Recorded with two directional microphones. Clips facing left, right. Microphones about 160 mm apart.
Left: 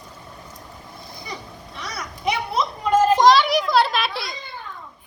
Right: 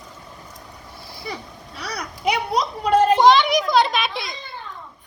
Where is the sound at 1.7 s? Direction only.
40° right (ahead or behind).